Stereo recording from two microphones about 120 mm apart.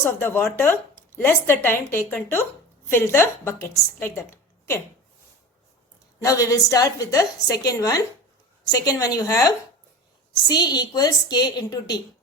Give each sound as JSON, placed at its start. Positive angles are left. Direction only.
{"t": 0.0, "sound": "a woman's voice", "side_deg": 20}
{"t": 6.1, "sound": "a woman's voice", "side_deg": 30}
{"t": 10.5, "sound": "a woman's voice", "side_deg": 35}